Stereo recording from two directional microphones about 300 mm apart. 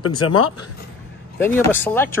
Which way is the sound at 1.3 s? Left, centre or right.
Centre.